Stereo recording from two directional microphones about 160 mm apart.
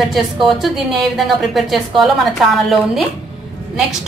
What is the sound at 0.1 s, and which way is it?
A woman's voice, centre (ahead or behind).